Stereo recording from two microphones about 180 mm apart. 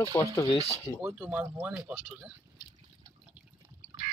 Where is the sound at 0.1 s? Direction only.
15° left (ahead or behind).